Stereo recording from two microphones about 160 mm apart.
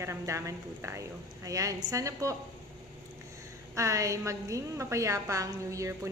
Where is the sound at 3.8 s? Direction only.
20° right (ahead or behind).